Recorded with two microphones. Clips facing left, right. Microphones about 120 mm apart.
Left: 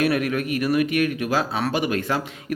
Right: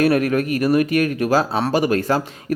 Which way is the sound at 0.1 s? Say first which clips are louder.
Right 5 dB; 40° right (ahead or behind).